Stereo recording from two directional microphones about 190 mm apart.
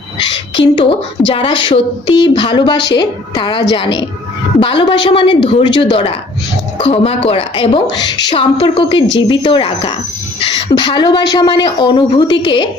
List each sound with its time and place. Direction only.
1.3 s speech: 25° left (ahead or behind)